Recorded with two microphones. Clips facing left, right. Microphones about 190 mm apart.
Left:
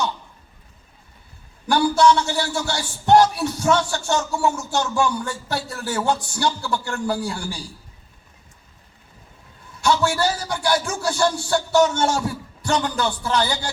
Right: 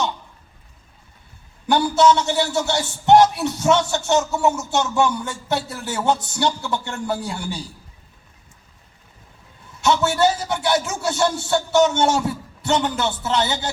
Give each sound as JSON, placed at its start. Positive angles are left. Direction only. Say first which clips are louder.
{"t": 1.6, "sound": "a man's voice", "louder": "even", "side_deg": -20}
{"t": 9.8, "sound": "a man's voice", "louder": "right 2 dB", "side_deg": -20}